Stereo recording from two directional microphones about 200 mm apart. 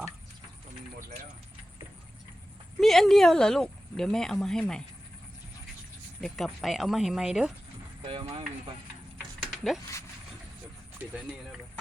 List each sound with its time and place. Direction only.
2.8 s speech: centre (ahead or behind)
6.2 s speech: centre (ahead or behind)
8.0 s speech: 25° right (ahead or behind)
9.1 s mechanisms: centre (ahead or behind)